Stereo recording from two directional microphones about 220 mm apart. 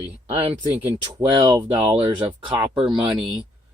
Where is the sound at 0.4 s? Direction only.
25° right (ahead or behind); by 3.4 s 5° right (ahead or behind).